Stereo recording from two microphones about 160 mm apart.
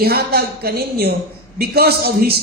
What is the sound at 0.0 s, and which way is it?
Speech, 75° right (ahead or behind).